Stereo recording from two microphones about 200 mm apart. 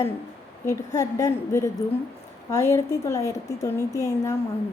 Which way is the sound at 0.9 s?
15° left (ahead or behind).